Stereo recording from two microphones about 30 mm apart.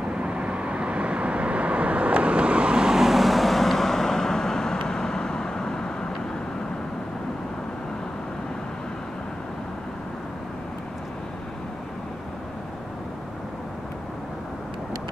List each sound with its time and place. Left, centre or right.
0.1 s vehicle: right
2.8 s vehicle: centre
3.1 s vehicle: centre